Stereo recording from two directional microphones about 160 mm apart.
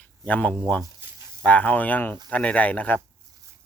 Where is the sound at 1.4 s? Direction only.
10° left (ahead or behind).